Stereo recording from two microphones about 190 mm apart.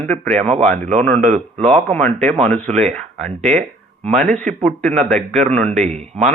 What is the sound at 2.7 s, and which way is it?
Speech, 35° right (ahead or behind).